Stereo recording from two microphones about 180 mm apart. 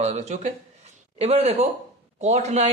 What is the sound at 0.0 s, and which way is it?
Speech, 40° right (ahead or behind).